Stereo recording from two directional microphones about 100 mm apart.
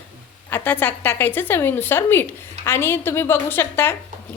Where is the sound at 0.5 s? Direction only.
20° left (ahead or behind).